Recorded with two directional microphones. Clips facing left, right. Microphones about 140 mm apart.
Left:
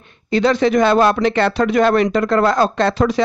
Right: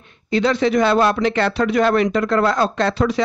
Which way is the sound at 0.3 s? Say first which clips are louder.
Left 2 dB; 45° left (ahead or behind).